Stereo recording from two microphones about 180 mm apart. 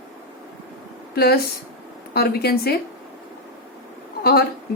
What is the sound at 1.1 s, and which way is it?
A woman's voice, 60° left (ahead or behind).